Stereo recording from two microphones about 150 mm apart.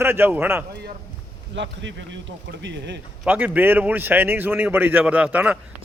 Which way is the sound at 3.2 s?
10° right (ahead or behind).